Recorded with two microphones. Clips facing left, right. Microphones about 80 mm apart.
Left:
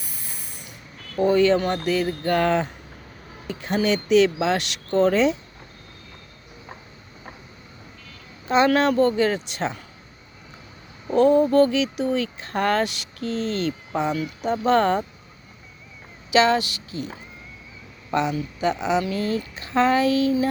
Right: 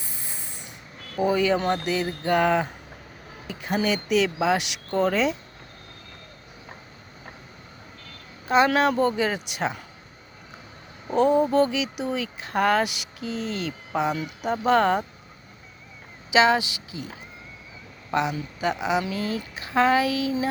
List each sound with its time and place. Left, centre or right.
0.0 s a sound: right
1.1 s speech: centre
8.4 s speech: centre
11.1 s speech: centre
16.3 s speech: centre
18.1 s speech: centre